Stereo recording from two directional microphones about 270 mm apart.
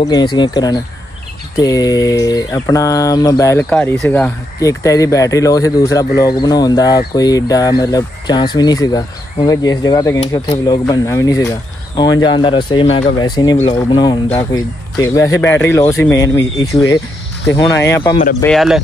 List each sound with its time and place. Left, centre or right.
0.0 s speech: centre
18.4 s speech: centre